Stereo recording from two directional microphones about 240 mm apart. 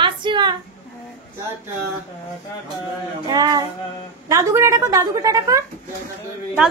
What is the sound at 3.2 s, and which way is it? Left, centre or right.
A woman's voice, centre.